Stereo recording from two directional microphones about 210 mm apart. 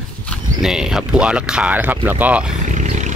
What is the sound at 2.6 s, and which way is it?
Roaring cats, 35° right (ahead or behind).